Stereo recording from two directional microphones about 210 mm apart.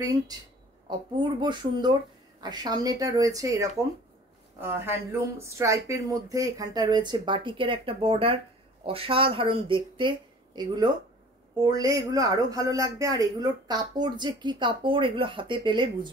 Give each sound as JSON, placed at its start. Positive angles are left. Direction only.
{"t": 0.8, "sound": "speech", "side_deg": -20}